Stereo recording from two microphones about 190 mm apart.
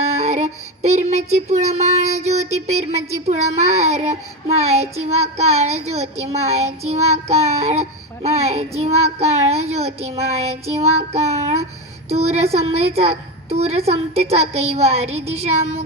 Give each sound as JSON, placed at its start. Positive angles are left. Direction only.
{"t": 0.0, "sound": "child singing", "side_deg": -35}